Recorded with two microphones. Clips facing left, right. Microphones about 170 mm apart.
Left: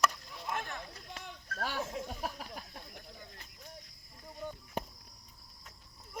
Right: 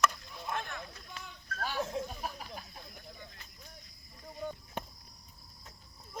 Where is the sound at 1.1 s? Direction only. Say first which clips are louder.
Left 2 dB; 60° left (ahead or behind).